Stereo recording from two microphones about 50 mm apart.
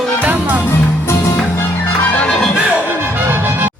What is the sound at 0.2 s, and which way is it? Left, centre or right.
Music, right.